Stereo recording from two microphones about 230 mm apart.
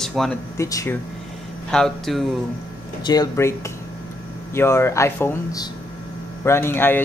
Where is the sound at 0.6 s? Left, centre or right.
Centre.